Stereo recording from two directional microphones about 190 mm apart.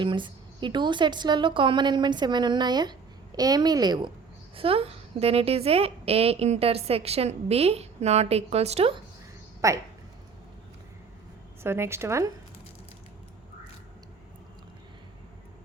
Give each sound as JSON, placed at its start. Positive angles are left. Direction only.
{"t": 0.0, "sound": "a woman's voice", "side_deg": -25}
{"t": 9.6, "sound": "speech", "side_deg": -15}
{"t": 11.6, "sound": "speech", "side_deg": -15}